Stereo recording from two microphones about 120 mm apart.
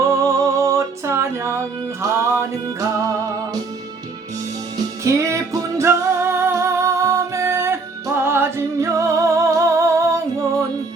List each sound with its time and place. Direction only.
0.1 s music: 25° right (ahead or behind)
5.0 s music: 25° right (ahead or behind)